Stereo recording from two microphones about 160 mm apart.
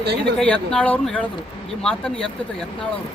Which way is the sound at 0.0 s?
90° right.